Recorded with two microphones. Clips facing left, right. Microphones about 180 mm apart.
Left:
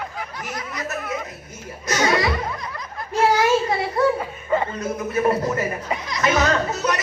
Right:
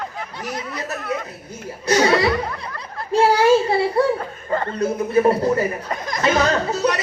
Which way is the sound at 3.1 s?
30° right (ahead or behind).